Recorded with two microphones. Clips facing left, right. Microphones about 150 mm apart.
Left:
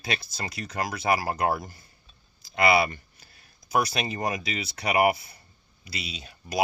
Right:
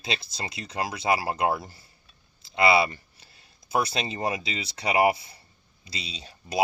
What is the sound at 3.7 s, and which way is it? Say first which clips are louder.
Speech: left 1 dB; 25° right (ahead or behind).